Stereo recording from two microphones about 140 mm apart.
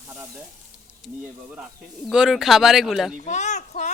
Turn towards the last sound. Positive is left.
turn(degrees=55)  # may be behind; listen again after turning